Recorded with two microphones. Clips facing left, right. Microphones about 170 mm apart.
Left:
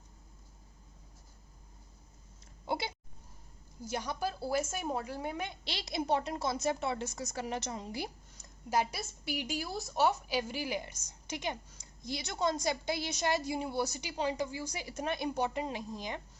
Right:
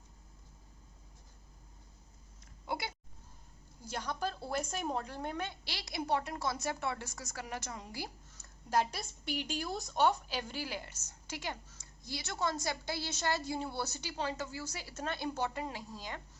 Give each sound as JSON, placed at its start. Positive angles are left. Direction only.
{"t": 2.6, "sound": "a sound", "side_deg": 25}
{"t": 3.8, "sound": "a woman's voice", "side_deg": 10}
{"t": 8.7, "sound": "a woman's voice", "side_deg": 10}